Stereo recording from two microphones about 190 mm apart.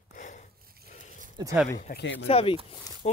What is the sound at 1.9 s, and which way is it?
Speech, 60° left (ahead or behind).